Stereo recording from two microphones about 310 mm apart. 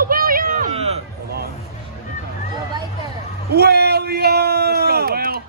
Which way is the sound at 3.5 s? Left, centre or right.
Right.